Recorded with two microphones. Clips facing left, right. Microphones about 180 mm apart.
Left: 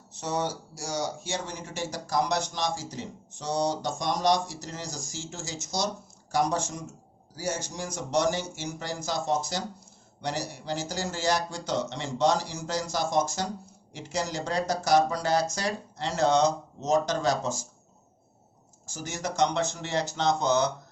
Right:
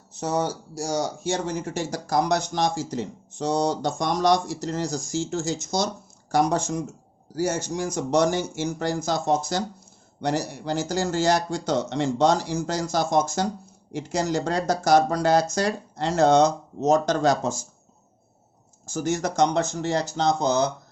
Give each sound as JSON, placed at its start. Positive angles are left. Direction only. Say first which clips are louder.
{"t": 0.2, "sound": "a man's voice", "louder": "right 5 dB", "side_deg": -40}
{"t": 18.9, "sound": "speech", "louder": "right 5 dB", "side_deg": -50}